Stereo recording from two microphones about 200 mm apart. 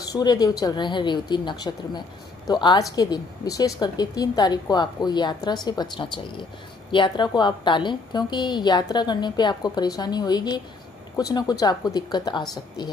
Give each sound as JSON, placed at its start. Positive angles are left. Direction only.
{"t": 0.1, "sound": "a woman's voice", "side_deg": 20}